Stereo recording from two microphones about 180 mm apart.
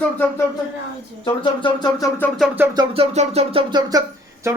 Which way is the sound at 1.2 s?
25° left (ahead or behind).